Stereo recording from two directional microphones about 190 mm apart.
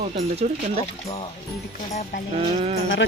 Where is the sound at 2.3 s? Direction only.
35° right (ahead or behind).